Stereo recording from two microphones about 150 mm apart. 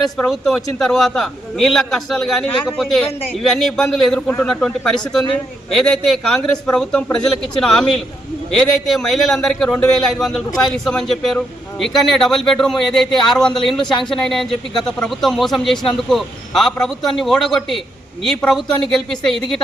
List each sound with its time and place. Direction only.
0.2 s speech: centre (ahead or behind)